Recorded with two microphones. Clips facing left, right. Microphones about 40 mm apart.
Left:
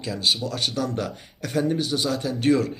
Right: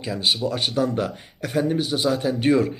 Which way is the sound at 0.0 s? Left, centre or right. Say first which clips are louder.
Right 2 dB; centre.